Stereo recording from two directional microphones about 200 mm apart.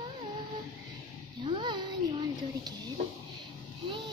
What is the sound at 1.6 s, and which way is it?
Speech, 20° right (ahead or behind).